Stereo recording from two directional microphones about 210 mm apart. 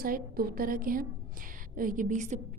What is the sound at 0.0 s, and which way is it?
A woman's voice, 45° right (ahead or behind).